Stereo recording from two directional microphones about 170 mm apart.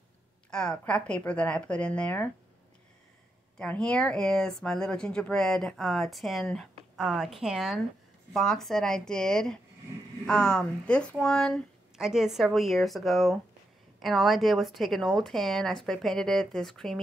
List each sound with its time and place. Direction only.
0.5 s speech: 5° left (ahead or behind)
3.5 s speech: 5° left (ahead or behind)